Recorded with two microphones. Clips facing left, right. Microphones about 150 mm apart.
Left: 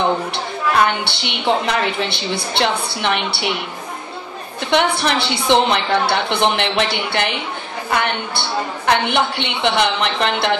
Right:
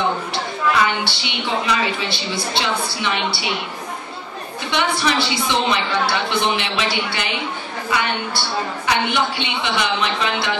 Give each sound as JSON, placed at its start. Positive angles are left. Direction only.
{"t": 0.3, "sound": "a woman's voice", "side_deg": 60}
{"t": 4.6, "sound": "a woman's voice", "side_deg": 60}